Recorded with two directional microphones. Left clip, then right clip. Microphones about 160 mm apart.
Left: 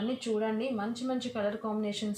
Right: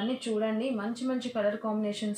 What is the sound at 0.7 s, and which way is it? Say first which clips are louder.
Speech: right 1 dB; 40° left (ahead or behind).